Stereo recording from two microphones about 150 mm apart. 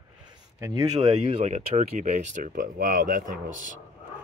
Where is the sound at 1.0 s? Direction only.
50° right (ahead or behind).